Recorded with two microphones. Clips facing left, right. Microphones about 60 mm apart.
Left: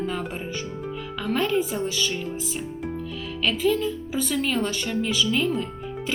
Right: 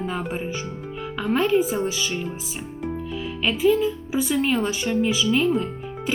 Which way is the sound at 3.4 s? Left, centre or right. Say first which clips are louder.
Right 3 dB; centre.